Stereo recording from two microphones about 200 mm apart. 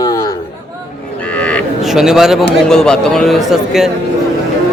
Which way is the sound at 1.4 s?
Centre (ahead or behind).